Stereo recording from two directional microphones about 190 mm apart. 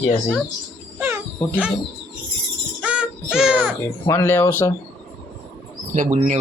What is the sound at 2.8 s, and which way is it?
Music, 5° right (ahead or behind).